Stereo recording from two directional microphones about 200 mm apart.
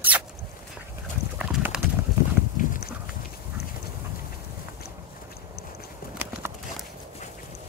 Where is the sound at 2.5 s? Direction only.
40° left (ahead or behind).